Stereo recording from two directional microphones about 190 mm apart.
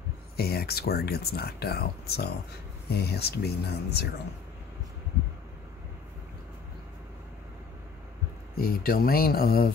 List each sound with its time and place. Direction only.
0.4 s speech: 55° left (ahead or behind)
8.5 s speech: 50° left (ahead or behind)